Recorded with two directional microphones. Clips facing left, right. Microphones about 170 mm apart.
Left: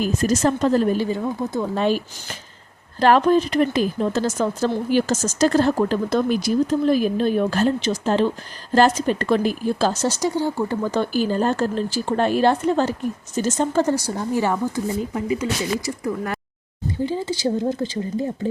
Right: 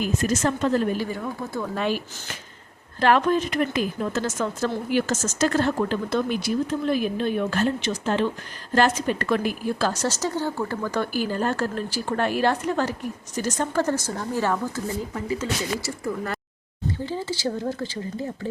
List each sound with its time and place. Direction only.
0.0 s speech: 35° left (ahead or behind)
1.0 s a woman's voice: 20° left (ahead or behind)
3.0 s a woman's voice: 35° left (ahead or behind)